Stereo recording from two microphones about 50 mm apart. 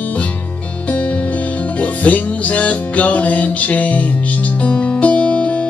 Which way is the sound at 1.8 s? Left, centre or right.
Left.